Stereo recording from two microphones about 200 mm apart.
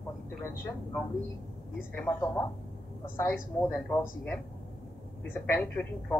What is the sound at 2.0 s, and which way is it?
Speech, 15° left (ahead or behind).